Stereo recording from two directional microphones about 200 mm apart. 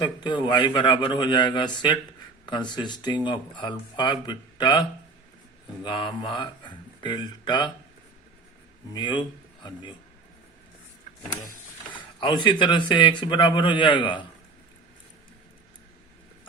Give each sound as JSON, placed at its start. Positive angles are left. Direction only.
{"t": 0.0, "sound": "speech", "side_deg": 20}
{"t": 8.9, "sound": "speech", "side_deg": 20}
{"t": 11.9, "sound": "speech", "side_deg": 25}